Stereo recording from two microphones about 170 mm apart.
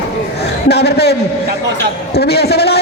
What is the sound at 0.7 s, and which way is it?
Speech, 70° left (ahead or behind).